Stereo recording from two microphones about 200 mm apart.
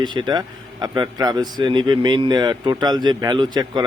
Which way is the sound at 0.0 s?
20° right (ahead or behind).